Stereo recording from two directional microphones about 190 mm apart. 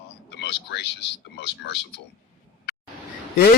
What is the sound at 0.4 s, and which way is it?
Speech, 60° left (ahead or behind).